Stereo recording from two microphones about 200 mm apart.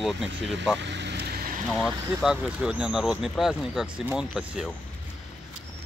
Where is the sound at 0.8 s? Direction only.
60° right (ahead or behind).